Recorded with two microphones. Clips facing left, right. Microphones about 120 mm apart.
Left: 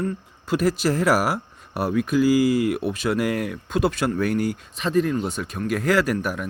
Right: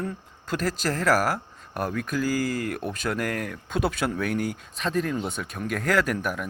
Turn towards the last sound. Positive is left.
turn(degrees=5)  # may be behind; listen again after turning